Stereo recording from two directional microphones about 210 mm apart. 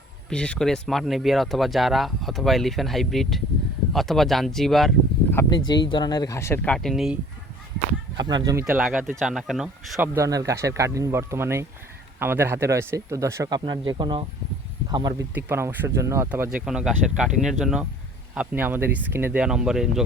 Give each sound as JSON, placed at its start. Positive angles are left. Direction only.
{"t": 0.3, "sound": "speech", "side_deg": 5}
{"t": 5.3, "sound": "speech", "side_deg": 15}
{"t": 8.1, "sound": "speech", "side_deg": -20}
{"t": 10.2, "sound": "speech", "side_deg": -15}